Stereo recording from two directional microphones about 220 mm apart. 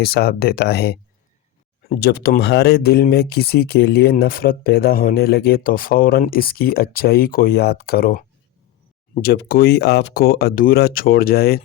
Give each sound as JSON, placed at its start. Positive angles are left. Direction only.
{"t": 0.0, "sound": "speech", "side_deg": 45}